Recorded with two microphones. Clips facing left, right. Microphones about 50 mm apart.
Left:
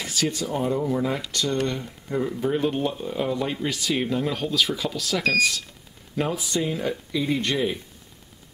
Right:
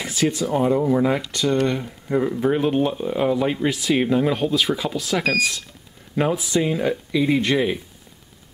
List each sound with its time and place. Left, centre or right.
0.0 s speech: centre
0.6 s speech: right